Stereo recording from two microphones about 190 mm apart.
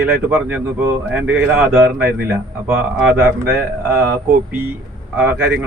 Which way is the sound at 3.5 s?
55° right (ahead or behind).